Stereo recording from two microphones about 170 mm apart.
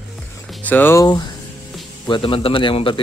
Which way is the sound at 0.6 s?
10° left (ahead or behind).